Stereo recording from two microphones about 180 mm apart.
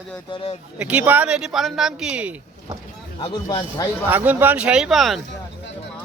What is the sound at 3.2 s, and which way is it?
Speech, 25° left (ahead or behind).